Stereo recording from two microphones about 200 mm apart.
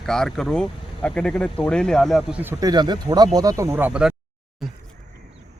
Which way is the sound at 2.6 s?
20° right (ahead or behind).